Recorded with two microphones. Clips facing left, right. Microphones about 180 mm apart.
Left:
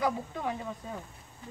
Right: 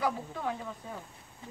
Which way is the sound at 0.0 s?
15° left (ahead or behind).